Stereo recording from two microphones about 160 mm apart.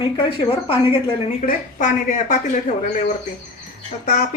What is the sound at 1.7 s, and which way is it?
Speech, 50° left (ahead or behind).